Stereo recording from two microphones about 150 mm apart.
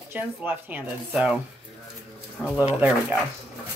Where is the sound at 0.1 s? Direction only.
10° right (ahead or behind).